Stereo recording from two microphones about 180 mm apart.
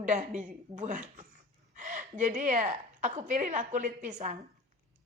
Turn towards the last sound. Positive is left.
turn(degrees=-45)  # may be behind; listen again after turning